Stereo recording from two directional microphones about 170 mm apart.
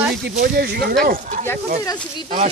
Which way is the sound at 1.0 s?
55° right (ahead or behind).